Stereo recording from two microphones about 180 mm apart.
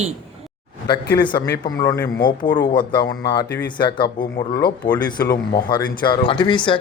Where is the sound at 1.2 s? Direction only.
25° left (ahead or behind).